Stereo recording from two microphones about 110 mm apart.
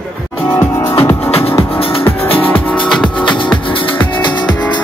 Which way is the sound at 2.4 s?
15° left (ahead or behind).